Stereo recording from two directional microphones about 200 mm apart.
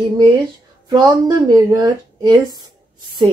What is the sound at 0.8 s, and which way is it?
A woman's voice, 20° right (ahead or behind).